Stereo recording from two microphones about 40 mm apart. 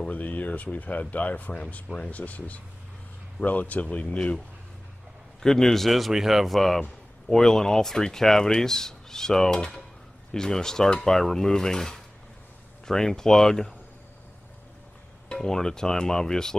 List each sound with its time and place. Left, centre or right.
0.1 s speech: left
5.4 s a man's voice: centre
6.8 s speech: centre
15.3 s speech: centre